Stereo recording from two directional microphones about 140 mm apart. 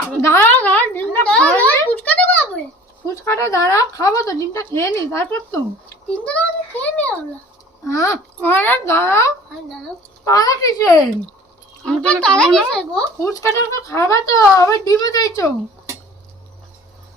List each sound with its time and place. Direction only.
0.0 s a sound: 20° left (ahead or behind)
3.2 s speech: 20° left (ahead or behind)
6.1 s a child's voice: 10° left (ahead or behind)
7.9 s a child's voice: 20° left (ahead or behind)
11.9 s a child's voice: 5° left (ahead or behind)
13.2 s speech: 20° left (ahead or behind)